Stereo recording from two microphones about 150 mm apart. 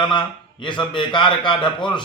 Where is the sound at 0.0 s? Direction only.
30° left (ahead or behind).